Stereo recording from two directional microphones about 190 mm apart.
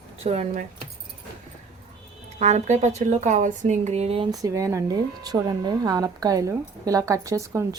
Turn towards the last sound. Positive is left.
turn(degrees=-15)  # may be behind; listen again after turning